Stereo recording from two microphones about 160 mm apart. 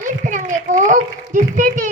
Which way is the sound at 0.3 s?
50° right (ahead or behind).